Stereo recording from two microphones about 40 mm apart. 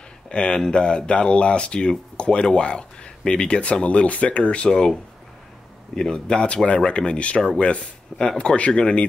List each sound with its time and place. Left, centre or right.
0.3 s speech: left
4.6 s speech: centre
5.9 s speech: left